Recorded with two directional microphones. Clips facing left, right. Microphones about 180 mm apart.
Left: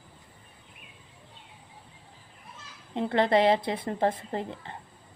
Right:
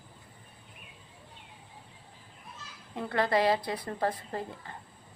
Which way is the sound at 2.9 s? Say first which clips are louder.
Left 4 dB; 25° left (ahead or behind).